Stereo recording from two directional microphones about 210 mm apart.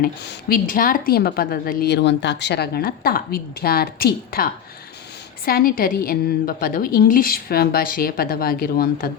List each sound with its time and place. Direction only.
0.0 s a woman's voice: 45° left (ahead or behind)
5.5 s a woman's voice: 45° left (ahead or behind)